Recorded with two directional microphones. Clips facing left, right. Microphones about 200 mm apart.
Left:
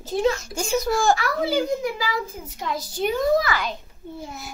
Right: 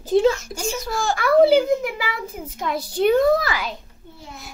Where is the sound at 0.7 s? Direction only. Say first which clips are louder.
Left 8 dB; 45° left (ahead or behind).